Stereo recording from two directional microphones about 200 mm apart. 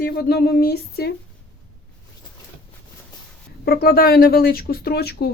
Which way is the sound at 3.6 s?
50° left (ahead or behind).